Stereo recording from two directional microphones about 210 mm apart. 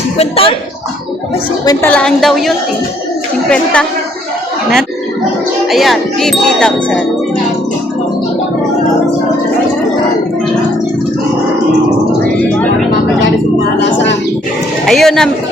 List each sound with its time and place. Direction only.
0.2 s speech: 25° left (ahead or behind)
1.6 s ding: 10° left (ahead or behind)
5.7 s ding: centre (ahead or behind)
13.7 s speech: 55° left (ahead or behind)
14.8 s ding: centre (ahead or behind)